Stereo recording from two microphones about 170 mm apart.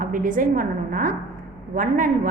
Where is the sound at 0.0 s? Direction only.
50° right (ahead or behind).